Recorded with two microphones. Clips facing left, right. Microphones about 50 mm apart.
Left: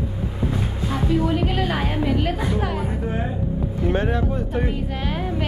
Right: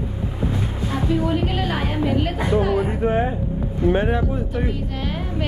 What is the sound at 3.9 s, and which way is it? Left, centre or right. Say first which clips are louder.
Speech: right 3 dB; centre.